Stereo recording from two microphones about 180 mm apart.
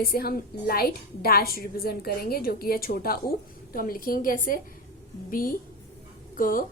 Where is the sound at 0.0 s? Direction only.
55° left (ahead or behind).